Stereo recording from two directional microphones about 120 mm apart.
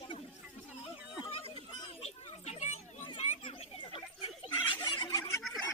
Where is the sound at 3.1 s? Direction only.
50° left (ahead or behind).